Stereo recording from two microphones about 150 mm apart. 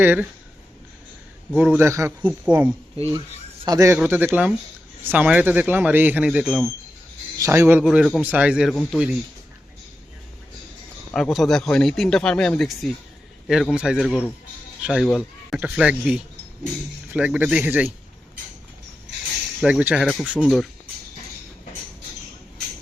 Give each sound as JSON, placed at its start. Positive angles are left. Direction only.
{"t": 0.0, "sound": "speech", "side_deg": -10}
{"t": 1.5, "sound": "speech", "side_deg": -10}
{"t": 3.7, "sound": "speech", "side_deg": -20}
{"t": 3.9, "sound": "speech", "side_deg": -10}
{"t": 7.3, "sound": "speech", "side_deg": -20}
{"t": 7.8, "sound": "speech", "side_deg": -5}
{"t": 11.1, "sound": "speech", "side_deg": 0}
{"t": 19.6, "sound": "speech", "side_deg": -10}